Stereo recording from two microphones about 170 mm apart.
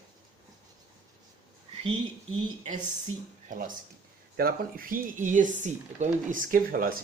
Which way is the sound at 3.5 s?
55° right (ahead or behind).